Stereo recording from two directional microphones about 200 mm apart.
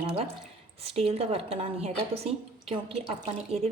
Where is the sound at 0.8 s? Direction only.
30° right (ahead or behind).